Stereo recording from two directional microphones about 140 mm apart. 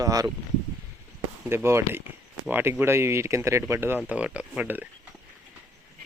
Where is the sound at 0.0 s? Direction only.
25° right (ahead or behind).